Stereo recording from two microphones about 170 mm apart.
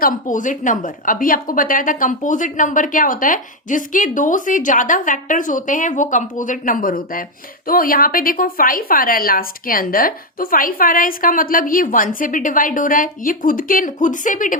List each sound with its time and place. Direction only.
0.0 s a woman's voice: 50° left (ahead or behind)